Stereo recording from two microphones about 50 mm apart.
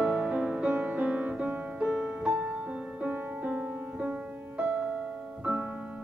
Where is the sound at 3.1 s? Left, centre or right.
Right.